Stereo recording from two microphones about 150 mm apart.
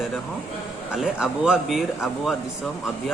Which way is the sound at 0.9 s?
5° right (ahead or behind).